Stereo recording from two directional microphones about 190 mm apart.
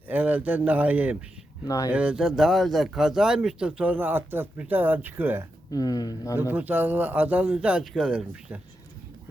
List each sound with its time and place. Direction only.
0.1 s speech: 10° right (ahead or behind)
1.6 s speech: 15° left (ahead or behind)
1.9 s speech: 5° right (ahead or behind)
5.7 s speech: 20° left (ahead or behind)
6.5 s speech: 10° right (ahead or behind)